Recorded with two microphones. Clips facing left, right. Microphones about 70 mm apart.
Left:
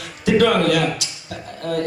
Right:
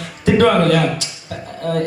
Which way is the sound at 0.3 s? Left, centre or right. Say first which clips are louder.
Right 3 dB; right.